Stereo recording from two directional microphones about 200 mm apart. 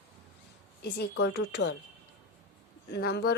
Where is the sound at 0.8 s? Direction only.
55° left (ahead or behind).